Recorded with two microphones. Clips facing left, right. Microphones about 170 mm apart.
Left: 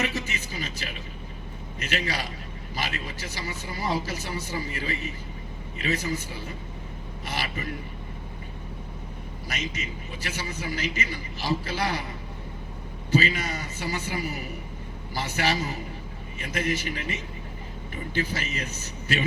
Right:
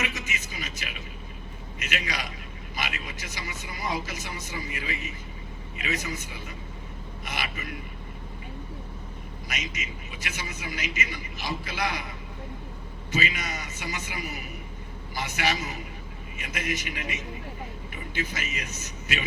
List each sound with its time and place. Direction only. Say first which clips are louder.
0.0 s a man's voice: left 4 dB; 35° left (ahead or behind)
9.5 s a man's voice: left 3 dB; 35° left (ahead or behind)
13.1 s a man's voice: left 5 dB; 35° left (ahead or behind)